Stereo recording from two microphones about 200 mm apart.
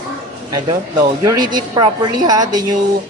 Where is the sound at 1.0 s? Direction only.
20° right (ahead or behind).